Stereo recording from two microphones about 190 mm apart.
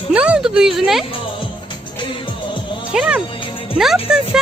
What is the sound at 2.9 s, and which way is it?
Music, 5° right (ahead or behind).